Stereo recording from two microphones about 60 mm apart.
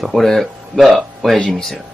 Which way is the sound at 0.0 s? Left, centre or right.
Centre.